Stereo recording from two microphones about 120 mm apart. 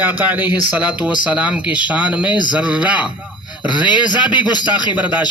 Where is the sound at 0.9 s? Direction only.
40° left (ahead or behind).